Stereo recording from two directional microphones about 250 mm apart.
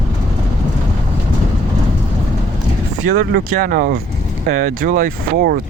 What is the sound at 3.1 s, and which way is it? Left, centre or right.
Speech, right.